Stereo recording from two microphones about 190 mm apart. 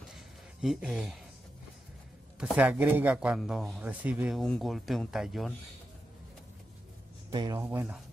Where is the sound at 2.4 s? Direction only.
5° right (ahead or behind).